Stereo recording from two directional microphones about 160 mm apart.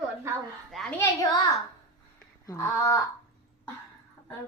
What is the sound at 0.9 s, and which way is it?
Speech, 20° left (ahead or behind).